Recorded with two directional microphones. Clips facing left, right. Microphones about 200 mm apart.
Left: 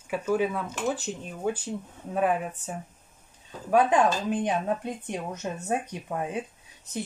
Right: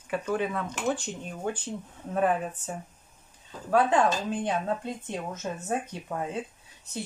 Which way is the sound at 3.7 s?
15° left (ahead or behind).